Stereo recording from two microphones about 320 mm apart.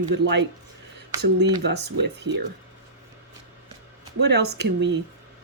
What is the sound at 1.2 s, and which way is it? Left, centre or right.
Speech, right.